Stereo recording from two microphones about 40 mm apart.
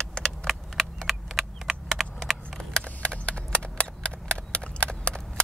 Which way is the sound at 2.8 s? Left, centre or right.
Left.